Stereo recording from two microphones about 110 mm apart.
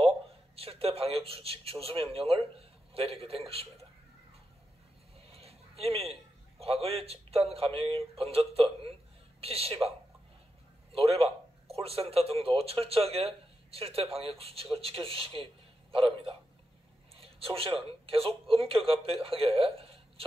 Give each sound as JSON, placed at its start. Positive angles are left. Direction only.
{"t": 0.6, "sound": "speech", "side_deg": -60}
{"t": 5.3, "sound": "a sound", "side_deg": -65}
{"t": 6.6, "sound": "speech", "side_deg": -65}
{"t": 11.0, "sound": "speech", "side_deg": -65}